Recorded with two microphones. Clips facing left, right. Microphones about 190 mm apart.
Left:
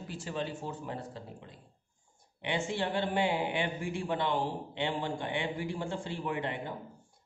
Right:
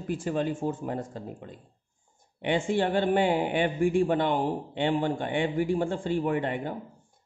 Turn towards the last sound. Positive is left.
turn(degrees=-50)  # may be behind; listen again after turning